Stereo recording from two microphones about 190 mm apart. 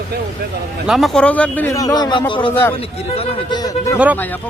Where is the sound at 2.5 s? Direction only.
10° left (ahead or behind).